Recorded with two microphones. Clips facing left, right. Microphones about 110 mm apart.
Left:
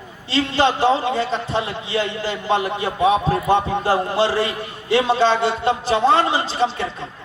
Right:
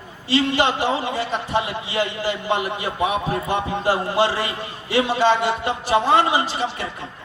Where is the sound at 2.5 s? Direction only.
15° right (ahead or behind).